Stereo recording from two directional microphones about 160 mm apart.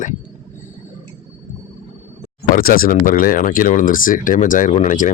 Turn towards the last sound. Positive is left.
turn(degrees=50)  # may be behind; listen again after turning